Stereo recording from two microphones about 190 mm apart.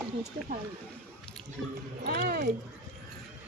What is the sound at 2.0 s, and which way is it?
Speech, 55° right (ahead or behind).